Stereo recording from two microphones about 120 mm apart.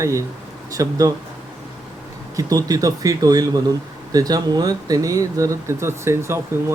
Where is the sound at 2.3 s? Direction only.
30° right (ahead or behind).